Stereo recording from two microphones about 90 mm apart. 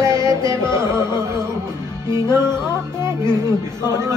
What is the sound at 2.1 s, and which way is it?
Music, 30° right (ahead or behind).